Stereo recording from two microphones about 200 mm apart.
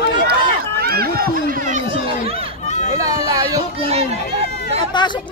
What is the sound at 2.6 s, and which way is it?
Run, 35° left (ahead or behind).